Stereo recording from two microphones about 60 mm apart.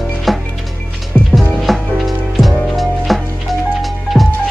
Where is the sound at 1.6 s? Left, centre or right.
Centre.